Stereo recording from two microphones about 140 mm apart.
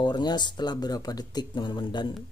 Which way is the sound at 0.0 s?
30° left (ahead or behind).